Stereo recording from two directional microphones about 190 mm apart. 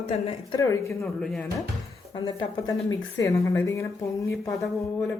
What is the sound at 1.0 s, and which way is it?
Speech, centre (ahead or behind).